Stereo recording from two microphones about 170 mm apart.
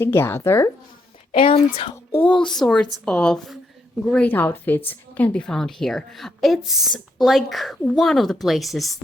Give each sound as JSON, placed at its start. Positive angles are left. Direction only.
{"t": 0.0, "sound": "speech", "side_deg": 15}
{"t": 1.3, "sound": "a woman's voice", "side_deg": 35}
{"t": 2.1, "sound": "a woman's voice", "side_deg": 10}